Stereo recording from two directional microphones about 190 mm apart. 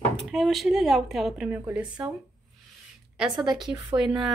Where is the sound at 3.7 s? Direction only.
20° right (ahead or behind).